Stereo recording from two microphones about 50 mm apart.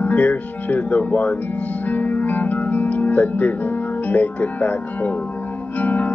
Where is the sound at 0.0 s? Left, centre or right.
Left.